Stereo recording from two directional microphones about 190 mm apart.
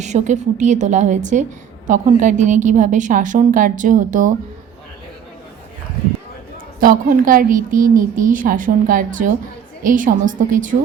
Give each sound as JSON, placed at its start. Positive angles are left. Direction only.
{"t": 0.0, "sound": "a woman's voice", "side_deg": -40}
{"t": 6.7, "sound": "a woman's voice", "side_deg": -45}